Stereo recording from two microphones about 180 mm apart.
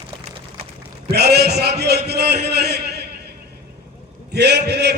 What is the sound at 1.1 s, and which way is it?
A man's voice, 65° right (ahead or behind).